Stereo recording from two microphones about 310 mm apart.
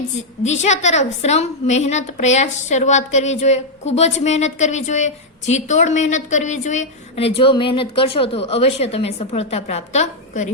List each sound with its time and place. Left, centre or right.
0.4 s a woman's voice: left